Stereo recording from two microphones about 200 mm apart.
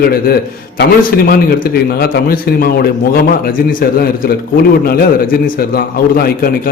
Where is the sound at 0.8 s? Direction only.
45° left (ahead or behind).